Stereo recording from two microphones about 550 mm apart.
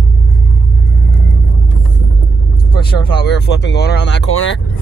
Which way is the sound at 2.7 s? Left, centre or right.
Centre.